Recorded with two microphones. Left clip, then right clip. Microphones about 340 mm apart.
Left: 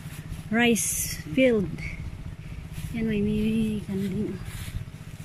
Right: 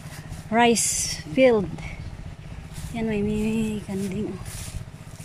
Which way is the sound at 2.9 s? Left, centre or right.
Centre.